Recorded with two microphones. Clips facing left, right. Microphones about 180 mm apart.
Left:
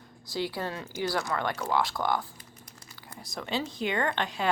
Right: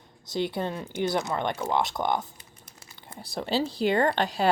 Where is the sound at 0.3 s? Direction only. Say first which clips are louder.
Right 4 dB; 20° right (ahead or behind).